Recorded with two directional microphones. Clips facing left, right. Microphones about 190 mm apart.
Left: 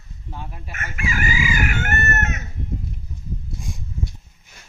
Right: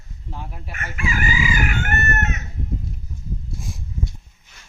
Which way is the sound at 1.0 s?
45° left (ahead or behind).